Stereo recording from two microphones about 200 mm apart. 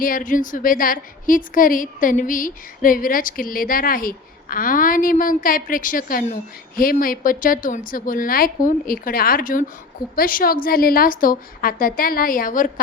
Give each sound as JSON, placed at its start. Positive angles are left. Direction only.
{"t": 0.0, "sound": "a woman's voice", "side_deg": 40}